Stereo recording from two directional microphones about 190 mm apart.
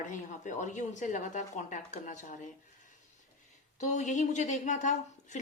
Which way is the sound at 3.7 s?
40° left (ahead or behind).